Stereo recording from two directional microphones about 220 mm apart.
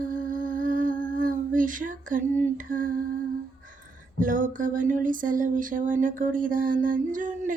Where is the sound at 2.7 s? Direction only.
40° right (ahead or behind).